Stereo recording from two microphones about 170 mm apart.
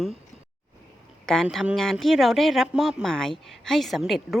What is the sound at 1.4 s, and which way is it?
Speech, 5° right (ahead or behind).